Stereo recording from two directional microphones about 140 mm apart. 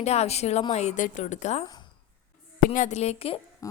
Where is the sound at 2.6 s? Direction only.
65° left (ahead or behind); by 3.4 s 45° left (ahead or behind).